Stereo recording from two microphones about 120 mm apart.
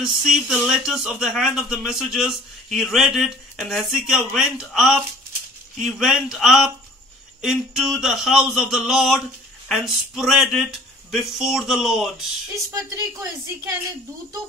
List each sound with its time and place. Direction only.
0.0 s speech: 5° right (ahead or behind)
12.7 s speech: 25° right (ahead or behind)